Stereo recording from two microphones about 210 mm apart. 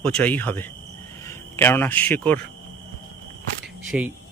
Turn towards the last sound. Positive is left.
turn(degrees=-5)  # may be behind; listen again after turning